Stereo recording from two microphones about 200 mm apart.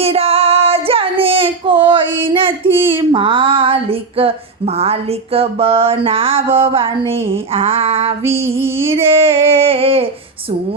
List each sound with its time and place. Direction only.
0.0 s child singing: 30° right (ahead or behind)
3.0 s female singing: 25° right (ahead or behind)
8.2 s female singing: 10° right (ahead or behind)
8.9 s female singing: 30° right (ahead or behind)